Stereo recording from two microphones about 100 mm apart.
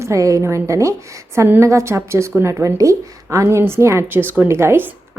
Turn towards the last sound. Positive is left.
turn(degrees=-25)  # may be behind; listen again after turning